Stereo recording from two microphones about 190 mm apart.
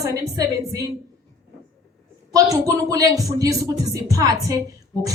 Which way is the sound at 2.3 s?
20° right (ahead or behind).